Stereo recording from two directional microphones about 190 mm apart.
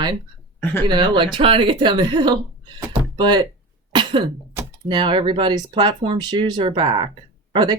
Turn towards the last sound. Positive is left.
turn(degrees=-25)  # may be behind; listen again after turning